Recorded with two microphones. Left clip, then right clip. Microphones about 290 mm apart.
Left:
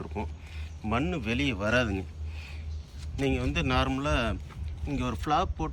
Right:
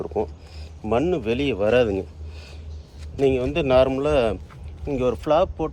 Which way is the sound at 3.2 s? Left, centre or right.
Centre.